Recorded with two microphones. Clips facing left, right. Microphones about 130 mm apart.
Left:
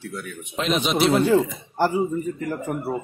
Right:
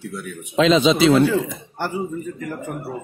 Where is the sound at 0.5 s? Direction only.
90° right.